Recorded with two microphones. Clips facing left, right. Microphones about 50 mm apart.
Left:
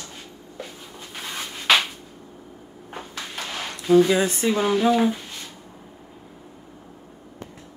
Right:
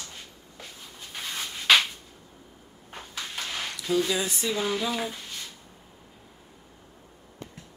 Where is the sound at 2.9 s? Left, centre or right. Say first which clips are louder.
Left 3 dB; centre.